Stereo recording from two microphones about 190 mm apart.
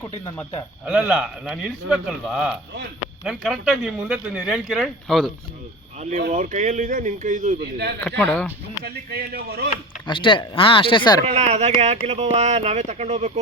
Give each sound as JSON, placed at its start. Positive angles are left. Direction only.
{"t": 0.0, "sound": "speech", "side_deg": 15}
{"t": 0.9, "sound": "speech", "side_deg": -5}
{"t": 6.0, "sound": "speech", "side_deg": -40}
{"t": 7.6, "sound": "speech", "side_deg": -60}
{"t": 8.0, "sound": "speech", "side_deg": 5}
{"t": 8.8, "sound": "speech", "side_deg": -55}
{"t": 10.1, "sound": "speech", "side_deg": 25}
{"t": 11.3, "sound": "speech", "side_deg": -35}